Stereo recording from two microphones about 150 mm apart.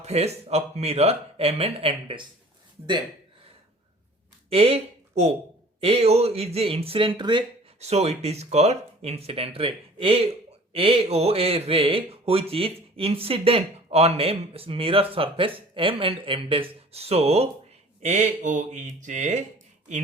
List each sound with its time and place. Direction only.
0.0 s speech: 45° right (ahead or behind)
4.4 s speech: 40° right (ahead or behind)
7.8 s speech: 45° right (ahead or behind)